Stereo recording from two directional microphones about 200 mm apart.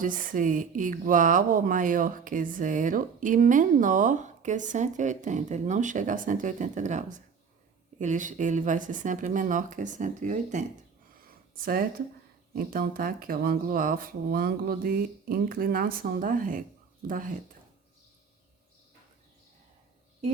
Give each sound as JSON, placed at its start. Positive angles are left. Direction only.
{"t": 0.0, "sound": "speech", "side_deg": -45}